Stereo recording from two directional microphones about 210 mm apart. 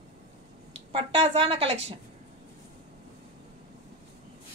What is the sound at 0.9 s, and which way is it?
A woman's voice, 25° right (ahead or behind).